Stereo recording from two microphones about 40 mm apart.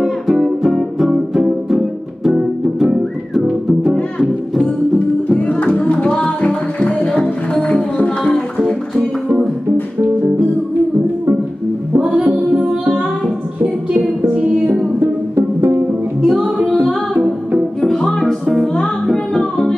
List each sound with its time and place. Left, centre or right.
0.0 s music: centre
4.6 s music: left
8.5 s music: centre
12.2 s music: right
15.0 s music: right
16.2 s music: centre
18.2 s music: centre